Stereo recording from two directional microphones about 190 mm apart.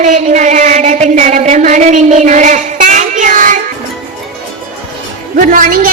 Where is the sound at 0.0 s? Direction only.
40° right (ahead or behind).